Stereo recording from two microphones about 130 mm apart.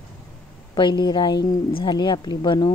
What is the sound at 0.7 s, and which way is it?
A woman's voice, 35° left (ahead or behind).